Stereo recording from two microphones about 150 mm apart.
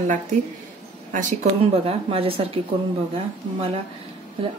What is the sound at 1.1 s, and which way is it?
Speech, 55° right (ahead or behind).